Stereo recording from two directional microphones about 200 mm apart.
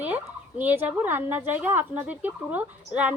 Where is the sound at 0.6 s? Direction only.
10° right (ahead or behind).